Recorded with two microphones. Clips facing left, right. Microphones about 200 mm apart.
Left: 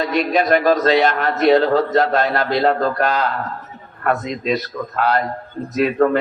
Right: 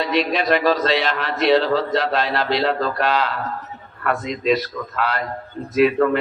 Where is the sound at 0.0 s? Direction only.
45° left (ahead or behind).